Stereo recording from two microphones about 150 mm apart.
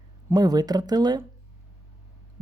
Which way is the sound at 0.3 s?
25° right (ahead or behind).